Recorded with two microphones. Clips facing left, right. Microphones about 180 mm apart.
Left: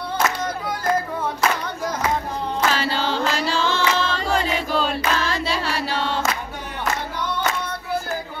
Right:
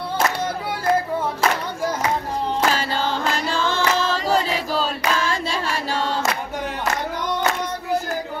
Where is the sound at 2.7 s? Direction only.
45° right (ahead or behind).